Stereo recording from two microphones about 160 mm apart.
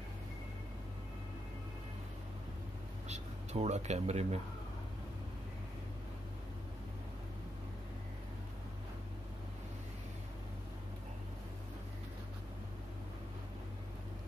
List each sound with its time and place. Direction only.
3.1 s speech: 45° right (ahead or behind)